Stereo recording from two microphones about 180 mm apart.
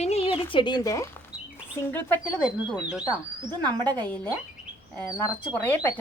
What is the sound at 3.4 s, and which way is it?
Speech, 20° right (ahead or behind).